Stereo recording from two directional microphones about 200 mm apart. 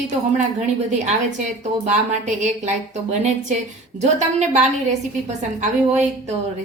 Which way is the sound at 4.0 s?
35° right (ahead or behind).